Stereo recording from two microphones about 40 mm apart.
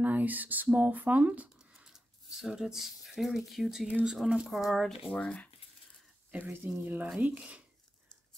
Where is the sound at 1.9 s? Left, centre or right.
Centre.